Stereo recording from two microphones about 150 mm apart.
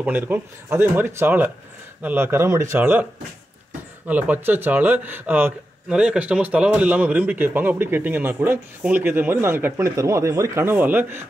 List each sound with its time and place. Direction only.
0.0 s speech: 10° right (ahead or behind)
4.1 s speech: 10° right (ahead or behind)